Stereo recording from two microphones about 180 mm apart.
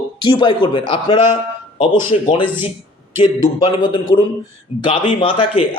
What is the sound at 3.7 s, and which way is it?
A man's voice, 30° left (ahead or behind).